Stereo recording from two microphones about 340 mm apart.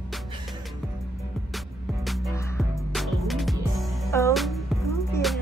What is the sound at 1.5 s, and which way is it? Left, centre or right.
Music, centre.